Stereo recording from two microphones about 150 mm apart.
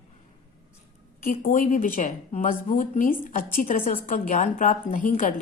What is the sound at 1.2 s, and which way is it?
Speech, 60° left (ahead or behind).